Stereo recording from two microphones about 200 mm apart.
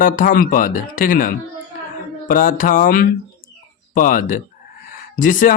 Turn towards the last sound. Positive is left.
turn(degrees=40)  # may be behind; listen again after turning